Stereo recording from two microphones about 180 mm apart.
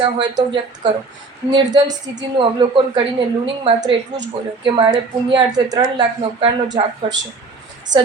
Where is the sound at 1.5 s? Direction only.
25° right (ahead or behind).